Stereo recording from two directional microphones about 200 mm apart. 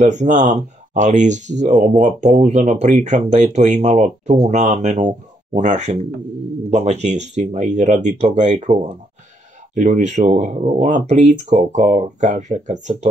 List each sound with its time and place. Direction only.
0.0 s speech: 35° right (ahead or behind)